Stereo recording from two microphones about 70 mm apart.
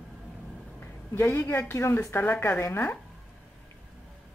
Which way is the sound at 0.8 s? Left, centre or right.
Left.